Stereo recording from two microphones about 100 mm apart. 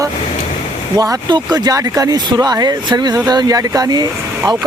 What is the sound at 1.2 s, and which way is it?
Speech, 45° right (ahead or behind).